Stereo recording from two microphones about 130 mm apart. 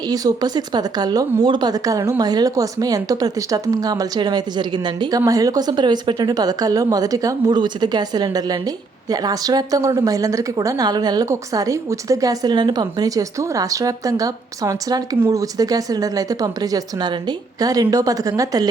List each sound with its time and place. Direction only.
0.1 s speech: 30° right (ahead or behind)